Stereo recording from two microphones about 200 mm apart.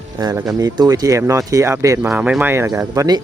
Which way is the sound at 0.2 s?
20° right (ahead or behind).